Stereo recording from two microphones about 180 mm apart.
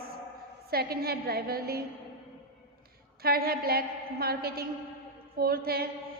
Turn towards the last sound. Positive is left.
turn(degrees=-55)  # may be behind; listen again after turning